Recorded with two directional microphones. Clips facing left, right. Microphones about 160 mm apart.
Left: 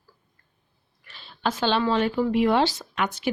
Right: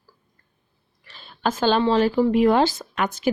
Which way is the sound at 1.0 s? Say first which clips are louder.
Right 3 dB; 40° right (ahead or behind).